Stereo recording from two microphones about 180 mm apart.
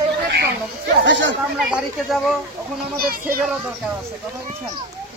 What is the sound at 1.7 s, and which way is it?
Speech, centre (ahead or behind).